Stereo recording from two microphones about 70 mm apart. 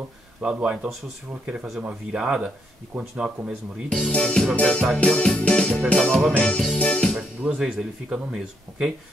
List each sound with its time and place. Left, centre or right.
0.4 s speech: centre
4.1 s speech: centre
7.2 s speech: centre